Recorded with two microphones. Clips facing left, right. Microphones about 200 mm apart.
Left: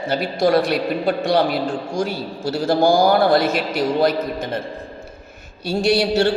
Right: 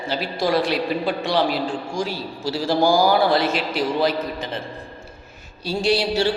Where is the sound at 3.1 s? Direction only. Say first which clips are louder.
Left 3 dB; 45° left (ahead or behind).